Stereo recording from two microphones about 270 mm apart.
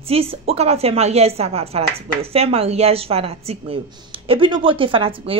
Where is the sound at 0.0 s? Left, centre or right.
Right.